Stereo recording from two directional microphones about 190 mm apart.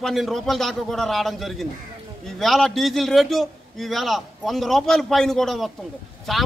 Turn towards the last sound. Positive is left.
turn(degrees=0)  # may be behind; listen again after turning